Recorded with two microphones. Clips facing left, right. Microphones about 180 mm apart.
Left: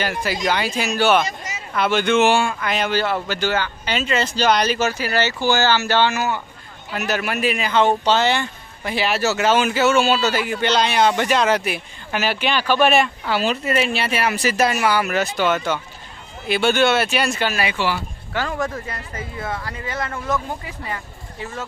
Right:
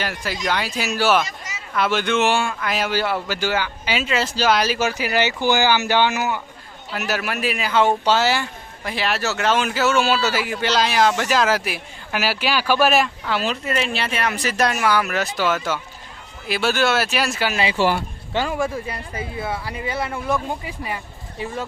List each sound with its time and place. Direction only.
0.0 s a man's voice: centre (ahead or behind); by 6.4 s 15° right (ahead or behind)
6.9 s a man's voice: 5° right (ahead or behind)
17.5 s speech: 25° right (ahead or behind)
17.7 s speech: 45° right (ahead or behind)
18.3 s speech: 15° right (ahead or behind)